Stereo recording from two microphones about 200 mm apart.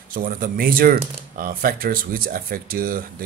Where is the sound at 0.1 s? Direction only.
45° right (ahead or behind).